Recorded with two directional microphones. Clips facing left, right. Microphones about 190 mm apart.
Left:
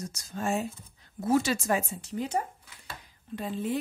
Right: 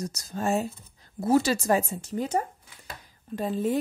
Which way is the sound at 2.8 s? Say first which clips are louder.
Right 2 dB; 40° right (ahead or behind).